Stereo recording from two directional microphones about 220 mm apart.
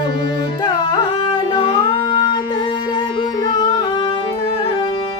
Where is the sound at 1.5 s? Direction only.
25° left (ahead or behind).